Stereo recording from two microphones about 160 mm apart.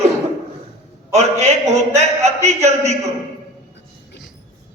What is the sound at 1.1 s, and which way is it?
A man's voice, 45° right (ahead or behind).